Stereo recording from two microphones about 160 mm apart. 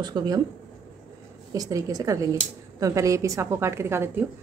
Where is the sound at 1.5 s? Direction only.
20° right (ahead or behind).